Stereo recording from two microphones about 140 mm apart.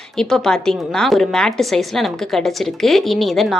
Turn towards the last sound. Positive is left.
turn(degrees=0)  # may be behind; listen again after turning